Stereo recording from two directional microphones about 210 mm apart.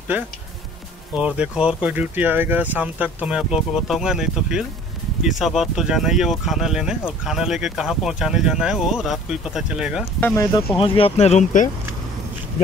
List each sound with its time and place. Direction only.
0.1 s speech: 5° right (ahead or behind)
10.2 s speech: 15° left (ahead or behind); by 11.7 s 35° left (ahead or behind)